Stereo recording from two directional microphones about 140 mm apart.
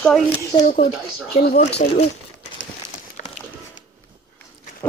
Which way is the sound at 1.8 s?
55° left (ahead or behind).